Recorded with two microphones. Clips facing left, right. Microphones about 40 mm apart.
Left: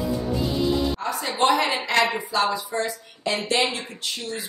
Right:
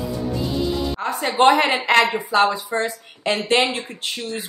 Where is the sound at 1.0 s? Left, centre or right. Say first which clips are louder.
Right 8 dB; right.